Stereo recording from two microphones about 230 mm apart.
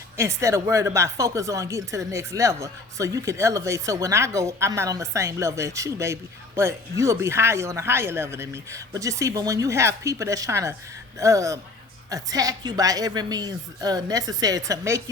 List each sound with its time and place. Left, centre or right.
0.2 s speech: centre